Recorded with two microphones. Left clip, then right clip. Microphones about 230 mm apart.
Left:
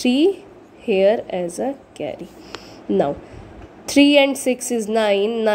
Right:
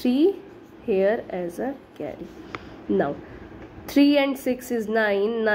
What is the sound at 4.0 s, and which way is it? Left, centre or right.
A woman's voice, centre.